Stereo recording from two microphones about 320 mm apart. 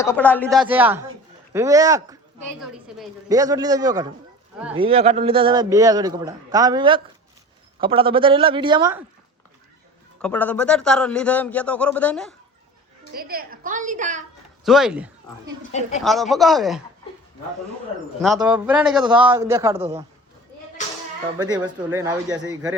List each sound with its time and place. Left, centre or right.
0.0 s a man's voice: centre
3.2 s a man's voice: centre
10.2 s a man's voice: centre
13.1 s a woman's voice: right
14.6 s speech: centre
15.7 s speech: left
16.0 s a man's voice: centre
18.3 s a man's voice: centre
21.3 s a man's voice: centre